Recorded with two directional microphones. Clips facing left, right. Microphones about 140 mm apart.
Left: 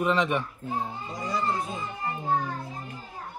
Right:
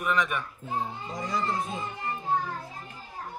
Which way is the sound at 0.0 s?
25° left (ahead or behind).